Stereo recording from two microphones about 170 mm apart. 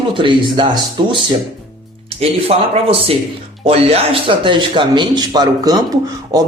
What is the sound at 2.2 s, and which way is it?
Speech, 35° right (ahead or behind).